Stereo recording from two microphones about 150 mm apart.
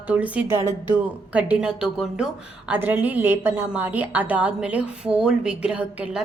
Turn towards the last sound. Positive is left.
turn(degrees=-10)  # may be behind; listen again after turning